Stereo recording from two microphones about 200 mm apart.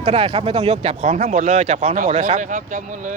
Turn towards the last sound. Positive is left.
turn(degrees=-40)  # may be behind; listen again after turning